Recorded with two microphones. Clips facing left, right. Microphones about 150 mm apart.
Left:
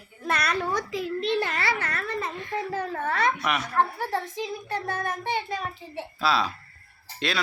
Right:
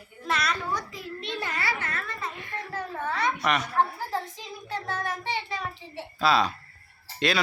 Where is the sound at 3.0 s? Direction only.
55° left (ahead or behind).